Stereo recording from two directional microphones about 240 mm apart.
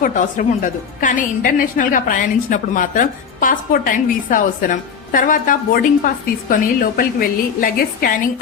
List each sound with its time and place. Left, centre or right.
0.0 s a woman's voice: left